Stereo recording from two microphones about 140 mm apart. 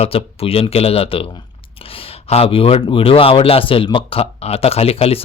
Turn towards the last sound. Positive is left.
turn(degrees=45)  # may be behind; listen again after turning